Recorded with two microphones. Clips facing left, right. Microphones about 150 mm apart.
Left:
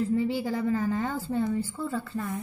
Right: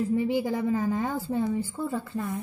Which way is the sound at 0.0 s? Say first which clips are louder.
Right 1 dB; 15° right (ahead or behind).